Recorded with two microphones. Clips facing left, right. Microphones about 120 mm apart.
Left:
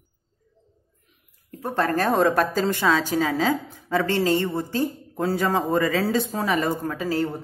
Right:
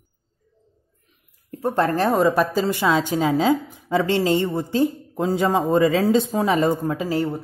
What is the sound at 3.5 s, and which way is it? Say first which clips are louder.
A woman's voice: right 4 dB; 15° right (ahead or behind).